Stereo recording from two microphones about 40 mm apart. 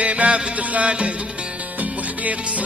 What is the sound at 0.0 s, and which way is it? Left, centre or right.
Music, right.